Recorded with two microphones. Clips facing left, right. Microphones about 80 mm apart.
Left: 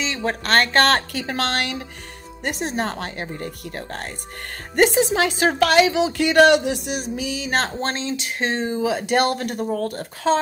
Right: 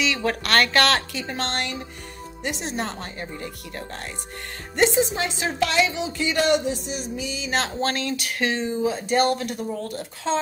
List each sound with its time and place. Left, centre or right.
0.0 s speech: left
1.1 s a woman's voice: left
2.4 s speech: left
4.7 s a woman's voice: left
7.9 s speech: left
8.5 s a woman's voice: left